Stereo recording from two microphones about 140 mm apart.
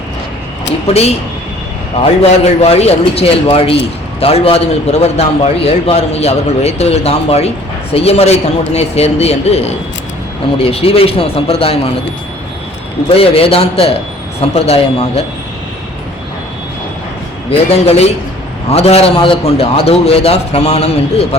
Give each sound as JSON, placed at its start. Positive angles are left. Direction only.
{"t": 0.9, "sound": "a man's voice", "side_deg": 50}
{"t": 13.1, "sound": "a man's voice", "side_deg": 45}
{"t": 17.7, "sound": "a man's voice", "side_deg": 50}